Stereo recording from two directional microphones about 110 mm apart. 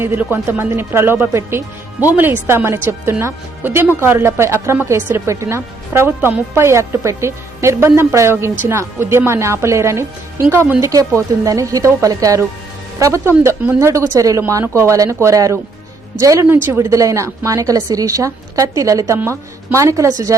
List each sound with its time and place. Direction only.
0.0 s a woman's voice: 20° right (ahead or behind)